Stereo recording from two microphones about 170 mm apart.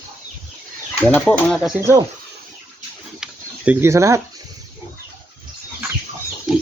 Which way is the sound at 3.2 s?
10° right (ahead or behind).